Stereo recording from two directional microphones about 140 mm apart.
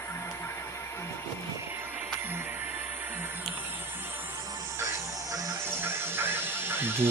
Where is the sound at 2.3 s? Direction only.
15° right (ahead or behind).